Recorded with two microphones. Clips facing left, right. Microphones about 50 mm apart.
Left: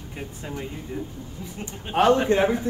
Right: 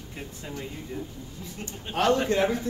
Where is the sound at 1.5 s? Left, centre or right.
Left.